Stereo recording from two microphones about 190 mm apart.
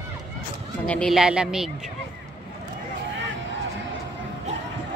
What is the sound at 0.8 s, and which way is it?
Speech, 5° left (ahead or behind).